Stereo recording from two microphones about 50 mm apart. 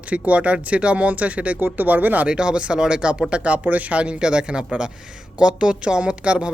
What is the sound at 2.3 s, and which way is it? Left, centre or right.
Speech, centre.